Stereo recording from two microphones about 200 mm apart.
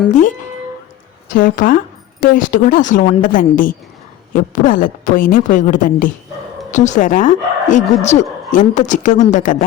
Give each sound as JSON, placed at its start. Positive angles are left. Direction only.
{"t": 0.1, "sound": "a woman's voice", "side_deg": 40}